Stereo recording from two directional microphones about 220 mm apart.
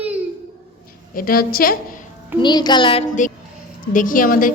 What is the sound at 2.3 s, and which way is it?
Speech, 20° left (ahead or behind).